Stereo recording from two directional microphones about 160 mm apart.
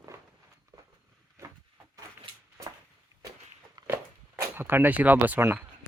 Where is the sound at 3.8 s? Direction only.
25° right (ahead or behind).